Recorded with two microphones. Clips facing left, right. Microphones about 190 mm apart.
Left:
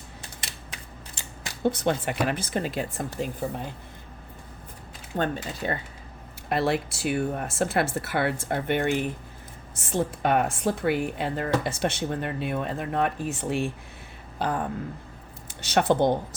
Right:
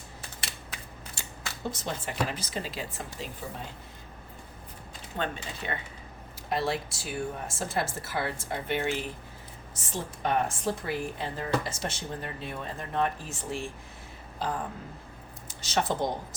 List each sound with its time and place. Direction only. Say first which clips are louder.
1.6 s speech: left 10 dB; 65° left (ahead or behind)
5.1 s speech: left 6 dB; 45° left (ahead or behind)
6.5 s speech: left 5 dB; 60° left (ahead or behind)
9.9 s speech: left 6 dB; 65° left (ahead or behind)
15.6 s speech: left 7 dB; 60° left (ahead or behind)